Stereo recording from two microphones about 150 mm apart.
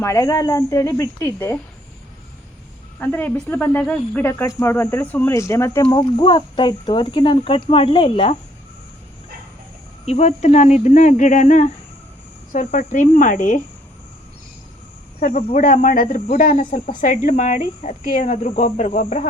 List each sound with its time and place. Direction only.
0.0 s a woman's voice: 20° left (ahead or behind)
3.0 s speech: 10° left (ahead or behind)
5.8 s speech: 30° left (ahead or behind)
10.1 s speech: 45° left (ahead or behind)
15.2 s speech: 55° left (ahead or behind)